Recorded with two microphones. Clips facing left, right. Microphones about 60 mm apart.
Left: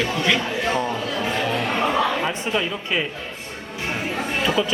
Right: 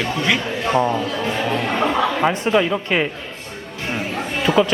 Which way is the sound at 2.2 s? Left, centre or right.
Right.